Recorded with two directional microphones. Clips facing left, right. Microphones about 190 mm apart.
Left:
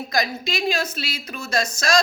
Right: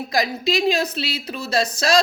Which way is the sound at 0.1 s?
30° right (ahead or behind).